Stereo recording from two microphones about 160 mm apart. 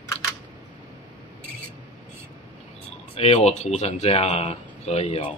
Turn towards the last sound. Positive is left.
turn(degrees=45)  # may be behind; listen again after turning